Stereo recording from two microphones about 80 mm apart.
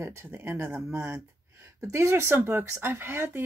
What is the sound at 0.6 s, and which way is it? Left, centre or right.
Speech, centre.